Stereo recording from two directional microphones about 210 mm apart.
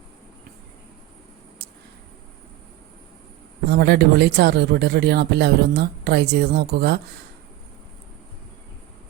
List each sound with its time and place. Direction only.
3.7 s speech: 50° right (ahead or behind)